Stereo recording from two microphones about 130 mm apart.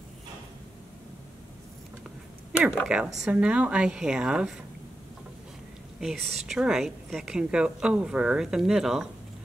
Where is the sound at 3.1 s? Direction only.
5° right (ahead or behind).